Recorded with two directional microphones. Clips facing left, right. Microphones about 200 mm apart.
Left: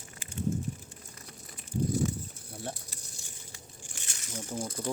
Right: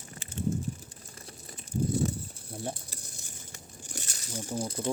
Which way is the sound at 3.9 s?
40° right (ahead or behind).